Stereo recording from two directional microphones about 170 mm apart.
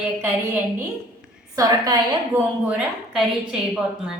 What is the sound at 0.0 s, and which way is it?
A woman's voice, 10° right (ahead or behind).